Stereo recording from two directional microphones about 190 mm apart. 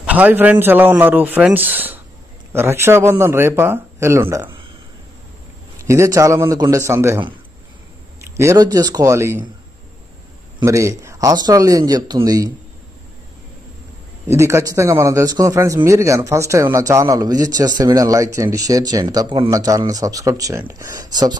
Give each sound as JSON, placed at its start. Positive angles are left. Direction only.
{"t": 0.0, "sound": "a man's voice", "side_deg": -10}
{"t": 5.9, "sound": "a man's voice", "side_deg": -15}
{"t": 8.4, "sound": "a man's voice", "side_deg": -15}
{"t": 10.6, "sound": "a man's voice", "side_deg": -15}
{"t": 14.2, "sound": "a man's voice", "side_deg": -15}